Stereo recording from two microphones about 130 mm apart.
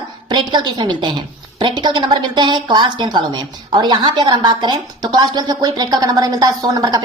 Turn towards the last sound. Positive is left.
turn(degrees=-30)  # may be behind; listen again after turning